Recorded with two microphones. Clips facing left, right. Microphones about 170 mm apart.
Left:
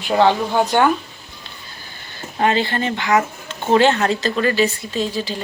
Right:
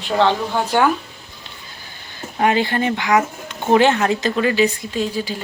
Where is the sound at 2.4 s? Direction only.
15° right (ahead or behind).